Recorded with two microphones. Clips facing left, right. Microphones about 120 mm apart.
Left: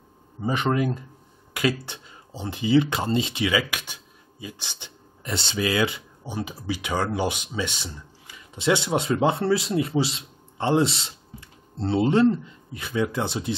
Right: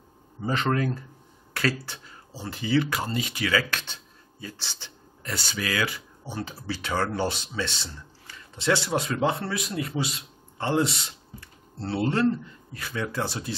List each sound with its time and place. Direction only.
0.4 s speech: 15° left (ahead or behind)